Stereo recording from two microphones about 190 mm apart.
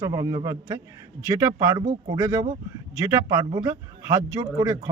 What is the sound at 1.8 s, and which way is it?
Speech, 30° right (ahead or behind).